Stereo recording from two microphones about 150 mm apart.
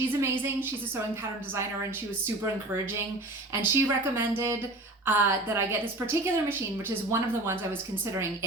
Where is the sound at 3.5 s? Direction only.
15° right (ahead or behind).